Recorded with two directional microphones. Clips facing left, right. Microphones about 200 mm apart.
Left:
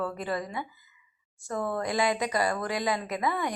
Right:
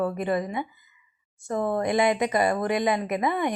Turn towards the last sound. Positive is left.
turn(degrees=-20)  # may be behind; listen again after turning